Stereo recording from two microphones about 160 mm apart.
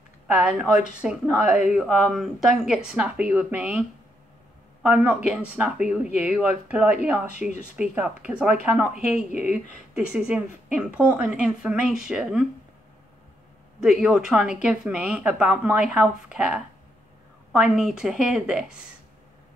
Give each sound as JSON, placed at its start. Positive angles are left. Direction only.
{"t": 0.3, "sound": "speech", "side_deg": -10}
{"t": 4.8, "sound": "speech", "side_deg": -10}
{"t": 9.3, "sound": "speech", "side_deg": 50}
{"t": 9.9, "sound": "speech", "side_deg": -5}
{"t": 13.7, "sound": "speech", "side_deg": -5}